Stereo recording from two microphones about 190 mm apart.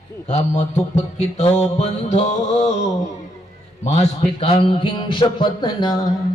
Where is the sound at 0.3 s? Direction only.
35° left (ahead or behind).